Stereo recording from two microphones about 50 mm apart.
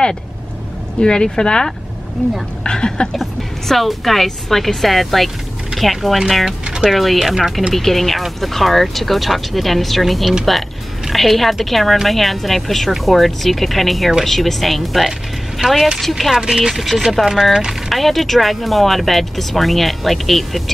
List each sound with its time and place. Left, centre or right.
1.0 s speech: centre
3.2 s speech: centre
7.7 s speech: centre
16.3 s speech: centre